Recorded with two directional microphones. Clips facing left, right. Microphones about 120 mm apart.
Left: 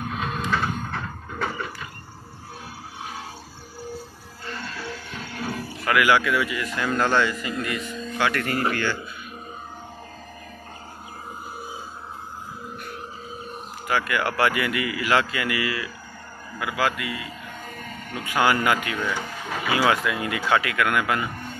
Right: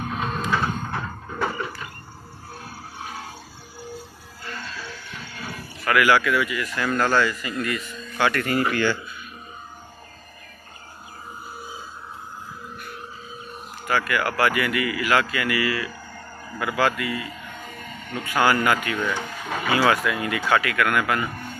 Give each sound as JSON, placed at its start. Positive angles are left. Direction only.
{"t": 0.0, "sound": "printer", "side_deg": 0}
{"t": 5.9, "sound": "speech", "side_deg": 15}
{"t": 8.2, "sound": "speech", "side_deg": 0}
{"t": 13.8, "sound": "speech", "side_deg": 20}
{"t": 16.5, "sound": "a man's voice", "side_deg": 10}
{"t": 18.9, "sound": "speech", "side_deg": 5}
{"t": 19.8, "sound": "a man's voice", "side_deg": 20}